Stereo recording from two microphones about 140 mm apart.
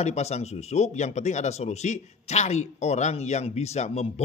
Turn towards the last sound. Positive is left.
turn(degrees=50)  # may be behind; listen again after turning